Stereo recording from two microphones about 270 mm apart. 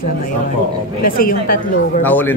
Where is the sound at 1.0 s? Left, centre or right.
Left.